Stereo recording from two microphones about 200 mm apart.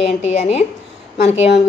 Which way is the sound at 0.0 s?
30° left (ahead or behind).